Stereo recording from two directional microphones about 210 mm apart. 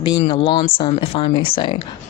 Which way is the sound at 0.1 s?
25° left (ahead or behind).